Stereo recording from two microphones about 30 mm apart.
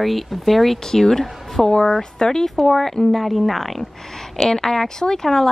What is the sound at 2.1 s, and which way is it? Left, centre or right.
Speech, left.